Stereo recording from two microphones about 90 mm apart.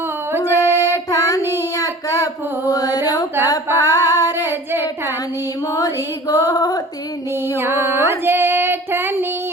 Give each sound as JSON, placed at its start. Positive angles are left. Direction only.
{"t": 0.3, "sound": "music", "side_deg": -25}
{"t": 0.9, "sound": "child singing", "side_deg": 40}
{"t": 1.5, "sound": "a sound", "side_deg": 40}
{"t": 3.9, "sound": "female singing", "side_deg": 40}
{"t": 4.4, "sound": "child singing", "side_deg": -25}
{"t": 5.7, "sound": "a sound", "side_deg": 40}
{"t": 7.4, "sound": "female singing", "side_deg": -25}